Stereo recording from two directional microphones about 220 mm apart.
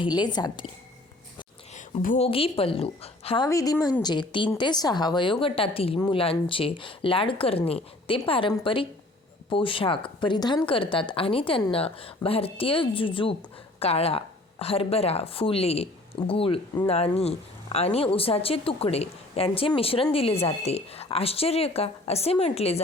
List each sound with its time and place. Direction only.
0.0 s speech: 20° left (ahead or behind)
1.7 s a woman's voice: 35° left (ahead or behind)